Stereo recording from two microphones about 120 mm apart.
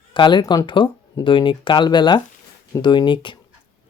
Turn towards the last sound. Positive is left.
turn(degrees=40)  # may be behind; listen again after turning